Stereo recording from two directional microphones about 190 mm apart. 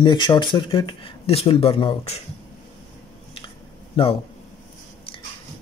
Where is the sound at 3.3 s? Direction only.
25° left (ahead or behind).